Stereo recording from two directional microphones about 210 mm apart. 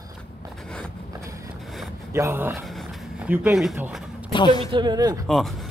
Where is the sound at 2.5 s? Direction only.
Centre (ahead or behind).